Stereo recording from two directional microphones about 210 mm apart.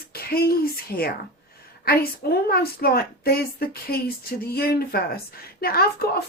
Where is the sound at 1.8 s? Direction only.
45° left (ahead or behind).